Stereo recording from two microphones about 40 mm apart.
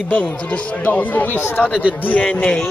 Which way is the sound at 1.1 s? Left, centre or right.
Left.